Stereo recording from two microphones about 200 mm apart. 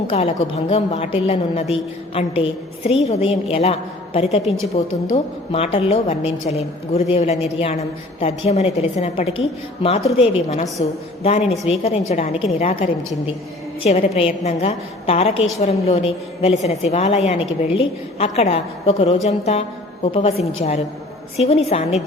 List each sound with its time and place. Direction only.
0.1 s a woman's voice: 30° left (ahead or behind)